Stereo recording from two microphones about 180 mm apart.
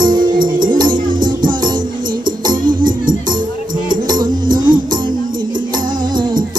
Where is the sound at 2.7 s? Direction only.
50° right (ahead or behind).